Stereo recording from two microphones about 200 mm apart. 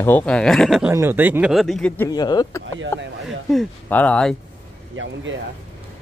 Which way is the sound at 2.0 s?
20° left (ahead or behind).